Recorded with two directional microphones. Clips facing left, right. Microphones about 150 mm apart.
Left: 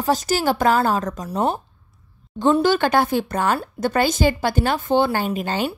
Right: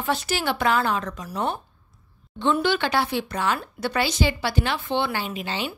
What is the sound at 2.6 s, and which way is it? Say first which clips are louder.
Speech: left 5 dB; 45° left (ahead or behind).